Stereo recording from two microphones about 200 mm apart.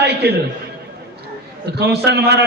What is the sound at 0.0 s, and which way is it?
Music, 55° right (ahead or behind).